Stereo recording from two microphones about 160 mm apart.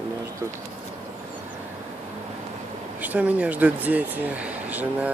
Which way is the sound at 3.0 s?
10° right (ahead or behind).